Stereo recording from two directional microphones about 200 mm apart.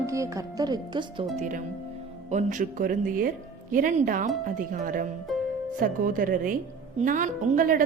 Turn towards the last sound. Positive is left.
turn(degrees=-45)  # may be behind; listen again after turning